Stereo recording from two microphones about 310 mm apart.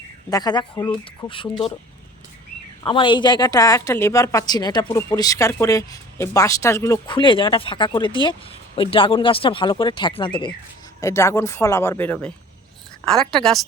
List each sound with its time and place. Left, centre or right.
0.3 s a woman's voice: centre
2.8 s a woman's voice: centre